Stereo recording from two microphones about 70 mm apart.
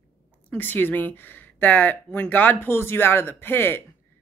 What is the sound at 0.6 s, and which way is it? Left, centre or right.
Speech, left.